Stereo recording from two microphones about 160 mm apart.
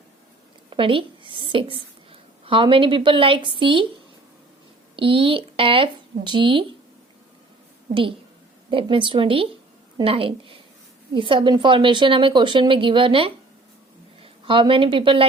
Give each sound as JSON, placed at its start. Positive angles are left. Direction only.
{"t": 0.7, "sound": "a woman's voice", "side_deg": -35}
{"t": 4.9, "sound": "a woman's voice", "side_deg": -35}
{"t": 8.7, "sound": "a woman's voice", "side_deg": -35}